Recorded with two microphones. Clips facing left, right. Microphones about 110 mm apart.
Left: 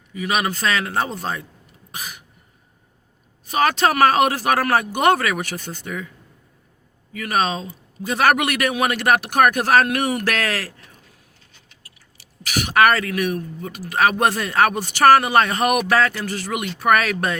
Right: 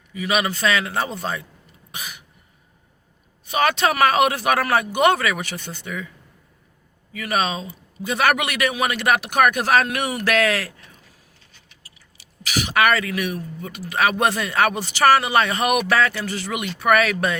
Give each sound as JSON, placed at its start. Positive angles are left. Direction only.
{"t": 0.1, "sound": "a man's voice", "side_deg": 40}
{"t": 1.9, "sound": "cough", "side_deg": 40}
{"t": 3.4, "sound": "speech", "side_deg": 40}
{"t": 7.1, "sound": "a man's voice", "side_deg": 45}
{"t": 11.8, "sound": "speech", "side_deg": 50}